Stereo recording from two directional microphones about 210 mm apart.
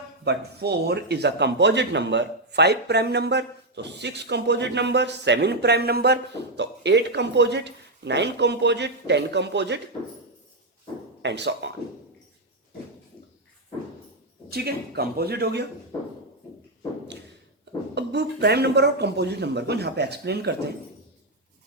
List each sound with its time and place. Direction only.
0.3 s speech: 50° right (ahead or behind)
11.2 s speech: 55° right (ahead or behind)
14.5 s speech: 50° right (ahead or behind)
17.9 s speech: 50° right (ahead or behind)